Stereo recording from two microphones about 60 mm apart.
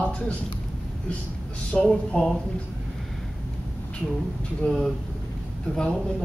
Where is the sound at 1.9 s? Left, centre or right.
Centre.